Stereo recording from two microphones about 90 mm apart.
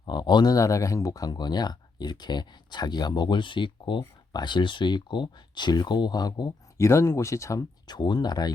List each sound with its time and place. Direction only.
0.0 s speech: 55° left (ahead or behind)
6.7 s speech: 30° left (ahead or behind)
7.9 s speech: 50° left (ahead or behind)